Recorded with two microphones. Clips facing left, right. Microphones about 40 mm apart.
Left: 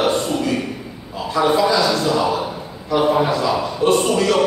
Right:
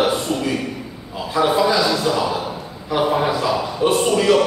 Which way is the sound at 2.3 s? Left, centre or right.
Centre.